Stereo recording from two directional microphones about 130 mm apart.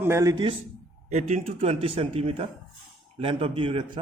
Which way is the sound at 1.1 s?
55° right (ahead or behind).